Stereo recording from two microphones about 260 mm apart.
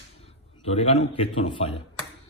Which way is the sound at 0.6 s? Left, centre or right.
Left.